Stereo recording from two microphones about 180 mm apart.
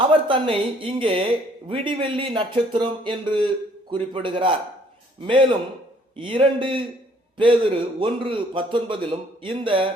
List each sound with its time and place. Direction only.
0.3 s speech: 30° right (ahead or behind)